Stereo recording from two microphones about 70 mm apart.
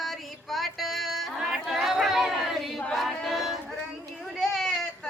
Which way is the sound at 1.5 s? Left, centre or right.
Centre.